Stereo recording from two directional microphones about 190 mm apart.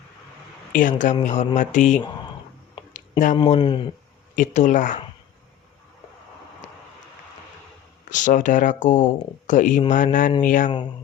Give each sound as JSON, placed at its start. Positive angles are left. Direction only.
{"t": 0.7, "sound": "speech", "side_deg": 45}
{"t": 2.9, "sound": "a sound", "side_deg": 40}
{"t": 3.6, "sound": "speech", "side_deg": 25}
{"t": 4.4, "sound": "speech", "side_deg": 40}
{"t": 8.1, "sound": "speech", "side_deg": 40}